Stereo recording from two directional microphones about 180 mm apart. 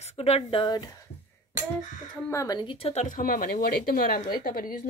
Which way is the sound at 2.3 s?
20° left (ahead or behind).